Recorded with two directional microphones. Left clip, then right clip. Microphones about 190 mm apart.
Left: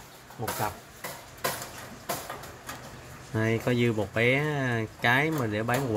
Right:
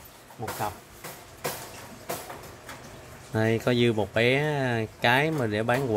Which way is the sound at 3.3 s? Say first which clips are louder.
Right 3 dB; 20° right (ahead or behind).